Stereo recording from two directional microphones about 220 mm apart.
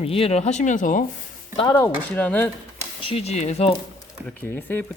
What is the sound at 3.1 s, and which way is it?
Speech, 30° left (ahead or behind).